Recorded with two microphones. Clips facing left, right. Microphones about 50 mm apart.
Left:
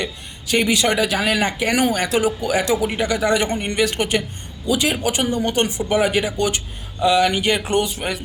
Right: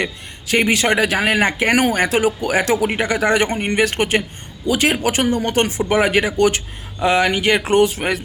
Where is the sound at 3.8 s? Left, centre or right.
Right.